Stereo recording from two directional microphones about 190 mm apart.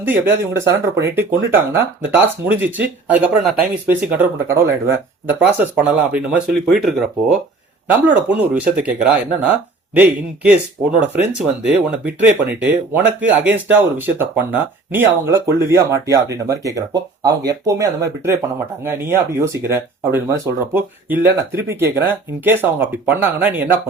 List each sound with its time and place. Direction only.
0.0 s speech: 10° right (ahead or behind)